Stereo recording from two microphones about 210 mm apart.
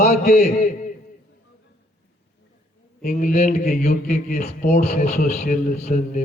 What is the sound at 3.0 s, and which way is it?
Mantra, 40° left (ahead or behind).